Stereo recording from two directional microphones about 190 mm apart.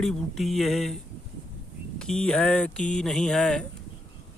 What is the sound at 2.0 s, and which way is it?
Speech, 5° left (ahead or behind).